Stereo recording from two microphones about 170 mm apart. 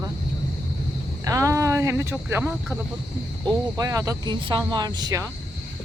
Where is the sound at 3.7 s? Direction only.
20° right (ahead or behind).